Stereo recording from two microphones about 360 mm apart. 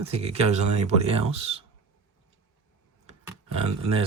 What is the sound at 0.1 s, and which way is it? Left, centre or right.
Speech, centre.